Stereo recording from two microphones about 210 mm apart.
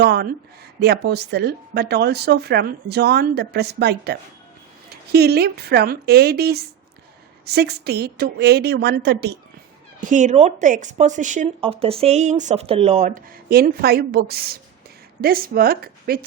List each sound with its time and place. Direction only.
0.0 s speech: 50° right (ahead or behind)
10.0 s speech: 35° right (ahead or behind)